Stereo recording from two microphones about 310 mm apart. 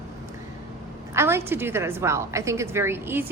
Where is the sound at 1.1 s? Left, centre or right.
Centre.